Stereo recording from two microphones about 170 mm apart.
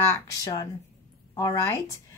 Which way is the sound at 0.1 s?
20° left (ahead or behind).